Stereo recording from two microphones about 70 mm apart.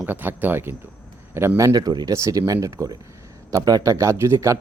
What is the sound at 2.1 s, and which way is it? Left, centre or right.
A man's voice, right.